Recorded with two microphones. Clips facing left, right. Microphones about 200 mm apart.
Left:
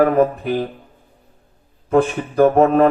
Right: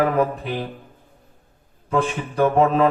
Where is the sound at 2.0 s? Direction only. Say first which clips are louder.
Left 6 dB; 35° left (ahead or behind).